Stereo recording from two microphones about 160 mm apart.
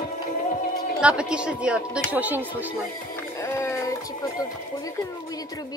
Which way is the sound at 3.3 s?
15° left (ahead or behind).